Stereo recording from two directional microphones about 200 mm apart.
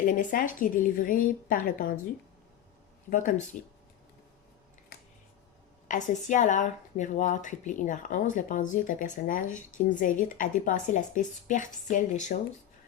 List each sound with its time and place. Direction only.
0.0 s a woman's voice: 40° left (ahead or behind)
3.1 s speech: 40° left (ahead or behind)
5.9 s speech: 35° left (ahead or behind)